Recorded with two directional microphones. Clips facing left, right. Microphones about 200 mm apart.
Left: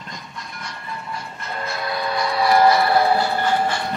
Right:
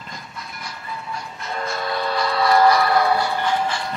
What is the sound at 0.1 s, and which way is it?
Train, 5° right (ahead or behind).